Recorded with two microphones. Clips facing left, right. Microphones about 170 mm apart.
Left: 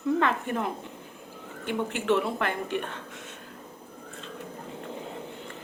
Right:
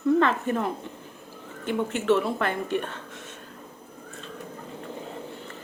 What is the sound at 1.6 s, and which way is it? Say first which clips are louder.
Speech: right 3 dB; 15° left (ahead or behind).